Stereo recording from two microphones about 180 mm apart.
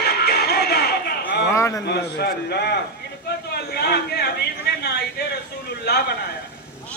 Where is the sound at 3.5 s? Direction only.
65° left (ahead or behind).